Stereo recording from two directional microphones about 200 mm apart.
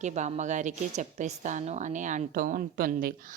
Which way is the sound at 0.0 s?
35° right (ahead or behind).